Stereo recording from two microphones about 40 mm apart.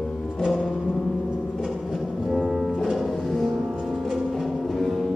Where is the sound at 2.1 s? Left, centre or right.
Centre.